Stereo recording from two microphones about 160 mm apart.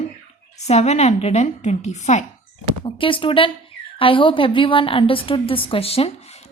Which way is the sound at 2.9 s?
35° left (ahead or behind).